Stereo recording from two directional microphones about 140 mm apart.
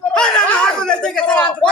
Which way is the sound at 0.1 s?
5° left (ahead or behind).